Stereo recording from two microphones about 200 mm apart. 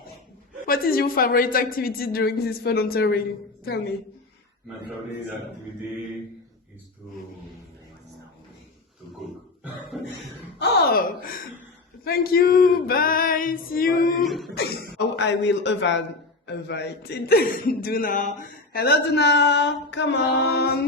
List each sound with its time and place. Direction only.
0.6 s a woman's voice: 45° left (ahead or behind)
9.9 s a sound: centre (ahead or behind)
10.6 s a woman's voice: 55° left (ahead or behind)
14.3 s a sound: centre (ahead or behind)
14.5 s mantra: 55° left (ahead or behind)
16.5 s a woman's voice: 60° left (ahead or behind)
18.7 s mantra: 50° left (ahead or behind)